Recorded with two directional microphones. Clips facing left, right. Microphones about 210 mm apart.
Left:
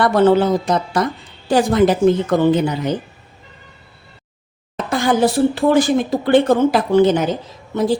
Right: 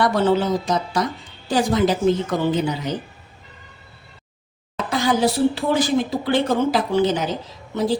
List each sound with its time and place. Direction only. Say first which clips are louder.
0.0 s speech: left 5 dB; 55° left (ahead or behind)
4.9 s speech: left 3 dB; 50° left (ahead or behind)